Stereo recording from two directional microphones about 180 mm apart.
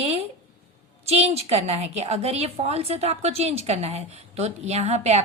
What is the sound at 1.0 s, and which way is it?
A woman's voice, 35° right (ahead or behind).